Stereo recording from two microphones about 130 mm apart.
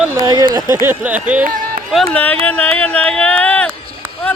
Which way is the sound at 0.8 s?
15° right (ahead or behind).